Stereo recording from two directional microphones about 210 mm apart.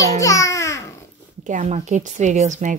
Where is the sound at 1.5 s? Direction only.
35° right (ahead or behind).